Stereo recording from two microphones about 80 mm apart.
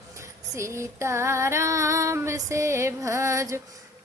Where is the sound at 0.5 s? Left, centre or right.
Right.